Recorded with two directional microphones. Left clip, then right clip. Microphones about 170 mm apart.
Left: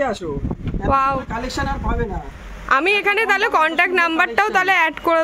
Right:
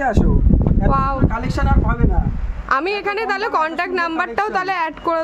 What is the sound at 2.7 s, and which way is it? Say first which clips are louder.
A woman's voice: left 3 dB; 5° left (ahead or behind).